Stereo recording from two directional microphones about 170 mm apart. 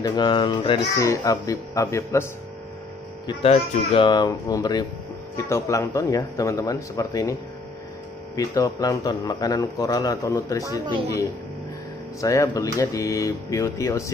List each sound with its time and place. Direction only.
0.0 s speech: 25° left (ahead or behind)
3.3 s speech: 35° left (ahead or behind)
8.4 s speech: 20° left (ahead or behind)
10.6 s speech: 20° right (ahead or behind)
12.2 s speech: 20° left (ahead or behind)